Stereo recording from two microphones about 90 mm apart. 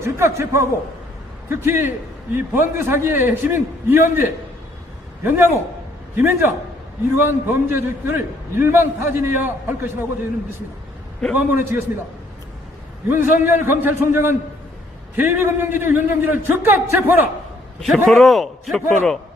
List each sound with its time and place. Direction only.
0.0 s a man's voice: 30° right (ahead or behind)
6.1 s a man's voice: 20° right (ahead or behind)
11.3 s a man's voice: 25° right (ahead or behind)
13.1 s a man's voice: 25° right (ahead or behind)
17.7 s a man's voice: 5° left (ahead or behind)